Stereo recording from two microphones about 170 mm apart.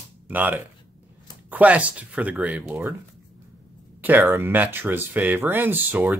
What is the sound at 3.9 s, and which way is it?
Speech, 10° right (ahead or behind).